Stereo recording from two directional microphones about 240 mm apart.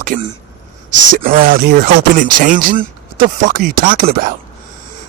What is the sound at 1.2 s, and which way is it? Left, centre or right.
Speech, right.